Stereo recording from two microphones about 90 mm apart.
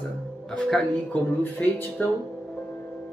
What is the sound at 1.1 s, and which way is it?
Speech, 20° left (ahead or behind).